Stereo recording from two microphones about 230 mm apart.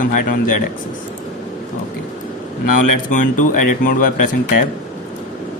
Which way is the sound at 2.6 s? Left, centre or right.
Left.